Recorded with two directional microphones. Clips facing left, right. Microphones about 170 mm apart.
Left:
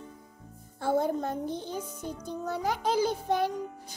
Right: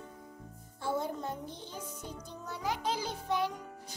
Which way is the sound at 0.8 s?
50° left (ahead or behind).